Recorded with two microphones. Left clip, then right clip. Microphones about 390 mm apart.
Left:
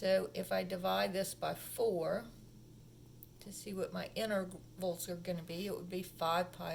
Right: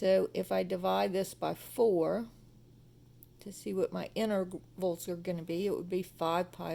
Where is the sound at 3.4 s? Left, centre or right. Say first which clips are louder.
Right 8 dB; centre.